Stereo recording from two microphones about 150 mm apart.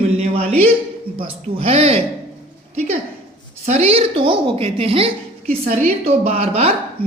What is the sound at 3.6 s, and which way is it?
A woman's voice, 45° right (ahead or behind).